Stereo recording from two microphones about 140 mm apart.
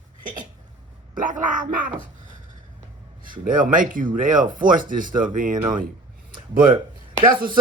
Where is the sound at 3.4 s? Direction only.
75° right (ahead or behind).